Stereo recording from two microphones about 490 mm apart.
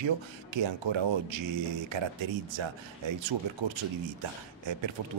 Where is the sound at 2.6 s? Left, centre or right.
Right.